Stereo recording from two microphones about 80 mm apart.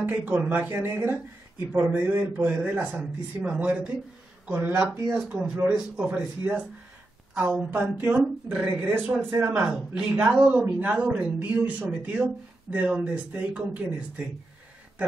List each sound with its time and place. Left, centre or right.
0.0 s a man's voice: right
4.5 s a man's voice: right
9.7 s a man's voice: centre